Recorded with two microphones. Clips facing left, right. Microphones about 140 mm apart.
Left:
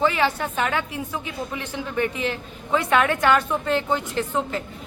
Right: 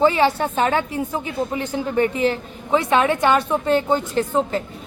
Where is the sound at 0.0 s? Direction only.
35° right (ahead or behind).